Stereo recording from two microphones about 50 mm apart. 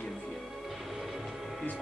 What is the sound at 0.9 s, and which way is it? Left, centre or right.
Music, centre.